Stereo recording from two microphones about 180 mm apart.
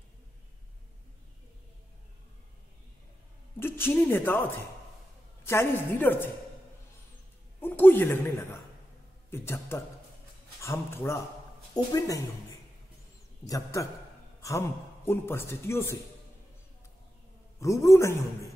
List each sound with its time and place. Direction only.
3.5 s a woman's voice: 10° left (ahead or behind)
7.6 s a woman's voice: 10° left (ahead or behind)
13.5 s a woman's voice: 15° left (ahead or behind)
15.0 s a woman's voice: 15° left (ahead or behind)
17.6 s a woman's voice: 15° left (ahead or behind)